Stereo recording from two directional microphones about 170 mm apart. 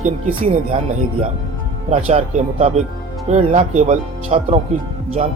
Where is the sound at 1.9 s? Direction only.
40° right (ahead or behind).